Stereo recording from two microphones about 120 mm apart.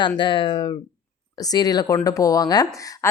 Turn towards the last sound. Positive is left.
turn(degrees=30)  # may be behind; listen again after turning